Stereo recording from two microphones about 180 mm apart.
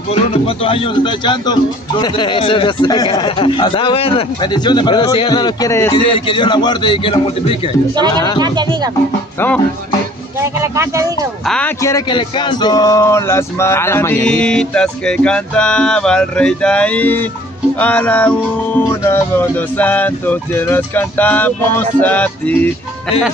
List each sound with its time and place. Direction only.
0.1 s speech: 30° left (ahead or behind)
5.9 s speech: 30° left (ahead or behind)
8.4 s speech: 25° right (ahead or behind)
10.4 s speech: 15° right (ahead or behind)
11.4 s speech: 5° left (ahead or behind)
11.8 s a sound: 20° left (ahead or behind)